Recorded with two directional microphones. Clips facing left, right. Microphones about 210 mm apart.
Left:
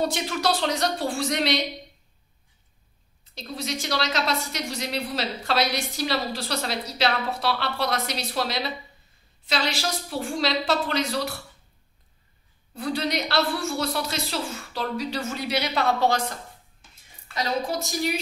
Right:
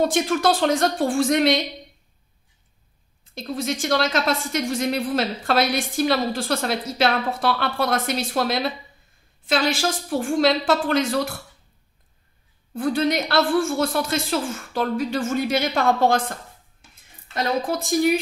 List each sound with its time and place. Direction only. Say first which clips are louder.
0.0 s a woman's voice: right 6 dB; 50° right (ahead or behind)
3.3 s a woman's voice: right 5 dB; 50° right (ahead or behind)
12.7 s a woman's voice: right 6 dB; 50° right (ahead or behind)